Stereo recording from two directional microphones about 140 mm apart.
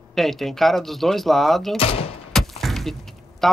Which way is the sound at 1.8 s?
45° left (ahead or behind).